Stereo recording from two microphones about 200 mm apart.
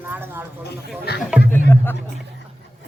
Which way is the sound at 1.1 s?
55° left (ahead or behind).